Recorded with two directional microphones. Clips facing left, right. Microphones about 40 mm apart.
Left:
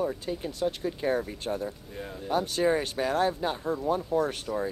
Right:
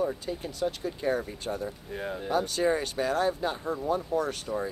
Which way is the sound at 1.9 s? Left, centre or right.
Right.